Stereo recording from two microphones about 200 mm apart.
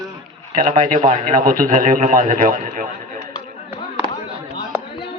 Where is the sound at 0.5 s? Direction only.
40° right (ahead or behind).